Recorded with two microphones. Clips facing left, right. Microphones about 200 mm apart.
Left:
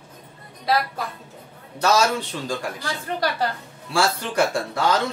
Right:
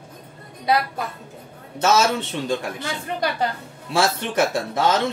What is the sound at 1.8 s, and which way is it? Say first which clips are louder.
Speech: right 1 dB; 25° right (ahead or behind).